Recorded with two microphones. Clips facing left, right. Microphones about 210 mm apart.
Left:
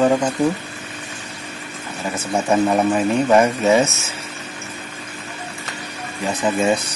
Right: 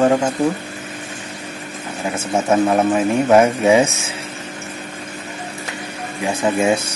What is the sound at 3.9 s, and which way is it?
Speech, 30° right (ahead or behind).